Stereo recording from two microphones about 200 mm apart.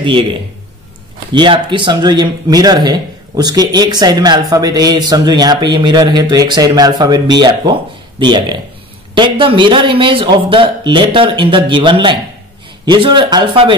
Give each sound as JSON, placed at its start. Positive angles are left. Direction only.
{"t": 0.0, "sound": "speech", "side_deg": -25}